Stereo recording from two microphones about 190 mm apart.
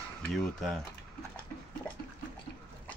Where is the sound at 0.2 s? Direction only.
Centre (ahead or behind).